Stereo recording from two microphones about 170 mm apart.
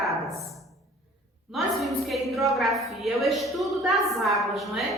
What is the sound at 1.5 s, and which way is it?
A woman's voice, centre (ahead or behind).